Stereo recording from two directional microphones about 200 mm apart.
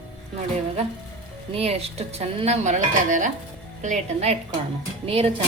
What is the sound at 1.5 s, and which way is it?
Speech, 30° right (ahead or behind).